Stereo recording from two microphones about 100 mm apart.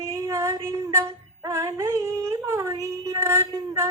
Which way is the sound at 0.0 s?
30° right (ahead or behind).